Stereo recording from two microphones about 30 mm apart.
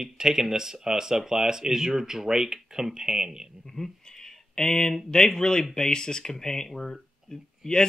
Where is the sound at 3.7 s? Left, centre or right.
Centre.